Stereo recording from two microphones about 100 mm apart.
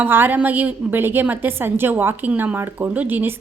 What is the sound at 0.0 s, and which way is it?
A woman's voice, 20° right (ahead or behind).